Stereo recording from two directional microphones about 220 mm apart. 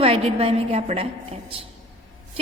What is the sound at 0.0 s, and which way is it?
A woman's voice, 25° right (ahead or behind).